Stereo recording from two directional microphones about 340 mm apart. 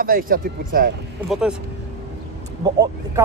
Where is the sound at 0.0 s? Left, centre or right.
Right.